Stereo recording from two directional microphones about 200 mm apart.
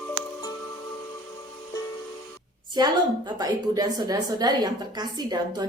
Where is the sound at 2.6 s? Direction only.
20° right (ahead or behind).